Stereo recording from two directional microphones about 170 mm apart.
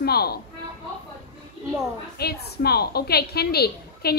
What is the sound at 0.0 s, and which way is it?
Speech, 65° left (ahead or behind).